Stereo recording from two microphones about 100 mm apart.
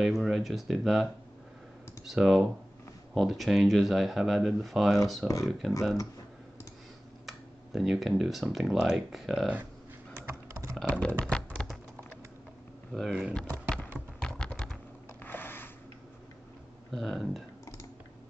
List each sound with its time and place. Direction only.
0.0 s speech: 5° right (ahead or behind)
2.0 s speech: 5° right (ahead or behind)
7.2 s speech: centre (ahead or behind)
10.1 s computer keyboard: 30° right (ahead or behind)
10.7 s computer keyboard: 10° left (ahead or behind)
12.9 s speech: centre (ahead or behind)
14.2 s typing: 10° left (ahead or behind)
15.2 s a sound: 20° left (ahead or behind)
16.9 s speech: 5° left (ahead or behind)